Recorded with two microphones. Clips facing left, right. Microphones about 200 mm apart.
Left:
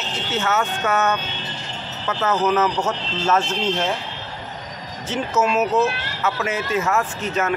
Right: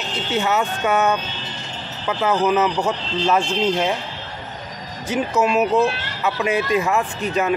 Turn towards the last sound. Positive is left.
turn(degrees=-15)  # may be behind; listen again after turning